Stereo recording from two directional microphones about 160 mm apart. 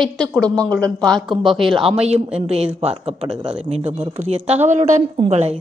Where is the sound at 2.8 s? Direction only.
35° right (ahead or behind).